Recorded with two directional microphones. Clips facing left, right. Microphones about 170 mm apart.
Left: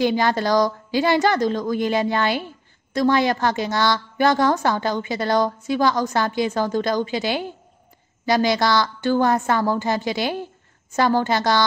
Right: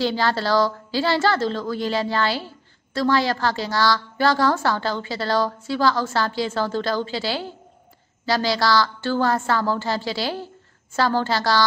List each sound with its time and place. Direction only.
0.0 s a woman's voice: 15° left (ahead or behind)